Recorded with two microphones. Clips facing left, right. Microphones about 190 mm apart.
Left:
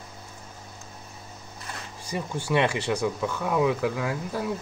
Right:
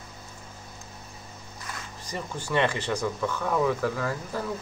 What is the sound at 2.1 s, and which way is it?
Speech, 15° left (ahead or behind).